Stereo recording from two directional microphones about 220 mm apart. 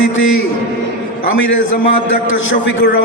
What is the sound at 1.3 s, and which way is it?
Speech, 60° left (ahead or behind).